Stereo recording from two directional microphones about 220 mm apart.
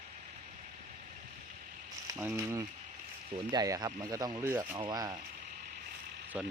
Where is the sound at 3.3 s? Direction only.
20° right (ahead or behind).